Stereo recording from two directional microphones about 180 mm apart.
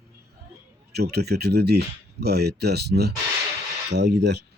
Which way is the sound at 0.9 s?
65° right (ahead or behind).